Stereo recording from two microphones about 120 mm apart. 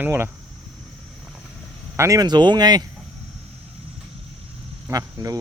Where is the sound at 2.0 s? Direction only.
30° right (ahead or behind).